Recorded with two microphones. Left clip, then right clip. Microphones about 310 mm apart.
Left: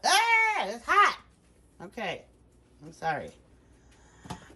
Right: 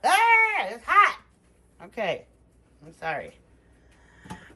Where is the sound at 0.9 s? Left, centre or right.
Centre.